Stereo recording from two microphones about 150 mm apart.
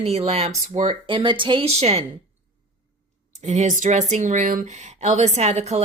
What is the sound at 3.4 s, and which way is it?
Speech, 50° right (ahead or behind).